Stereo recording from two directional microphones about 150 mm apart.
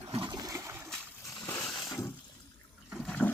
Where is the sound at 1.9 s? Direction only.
20° left (ahead or behind).